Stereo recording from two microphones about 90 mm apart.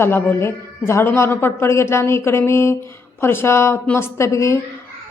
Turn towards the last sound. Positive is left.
turn(degrees=35)  # may be behind; listen again after turning